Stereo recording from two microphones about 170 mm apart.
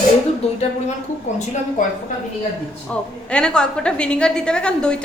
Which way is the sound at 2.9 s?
5° left (ahead or behind).